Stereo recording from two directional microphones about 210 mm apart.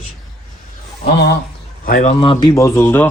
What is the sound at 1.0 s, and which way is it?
Speech, 50° left (ahead or behind).